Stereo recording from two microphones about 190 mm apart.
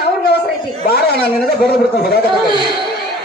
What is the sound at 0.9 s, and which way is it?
A man's voice, 55° left (ahead or behind).